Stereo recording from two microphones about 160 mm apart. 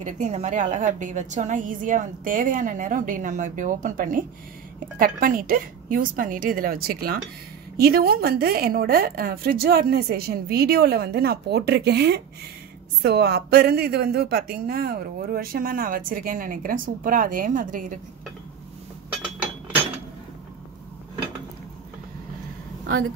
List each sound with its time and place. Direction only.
0.0 s a woman's voice: 45° right (ahead or behind)